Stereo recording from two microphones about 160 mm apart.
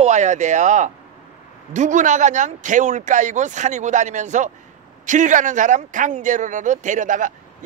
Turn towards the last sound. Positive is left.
turn(degrees=-55)  # may be behind; listen again after turning